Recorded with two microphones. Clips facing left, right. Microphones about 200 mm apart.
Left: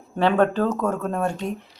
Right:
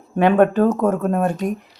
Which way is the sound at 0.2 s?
20° right (ahead or behind).